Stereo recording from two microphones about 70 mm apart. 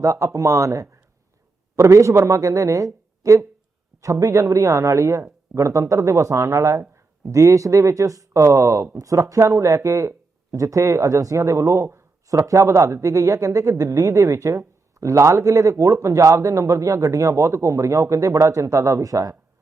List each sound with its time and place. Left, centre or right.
0.0 s speech: right